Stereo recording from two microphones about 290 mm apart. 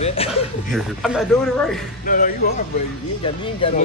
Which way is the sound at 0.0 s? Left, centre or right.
Centre.